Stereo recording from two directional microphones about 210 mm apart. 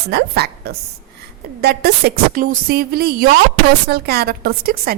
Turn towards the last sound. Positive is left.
turn(degrees=-45)  # may be behind; listen again after turning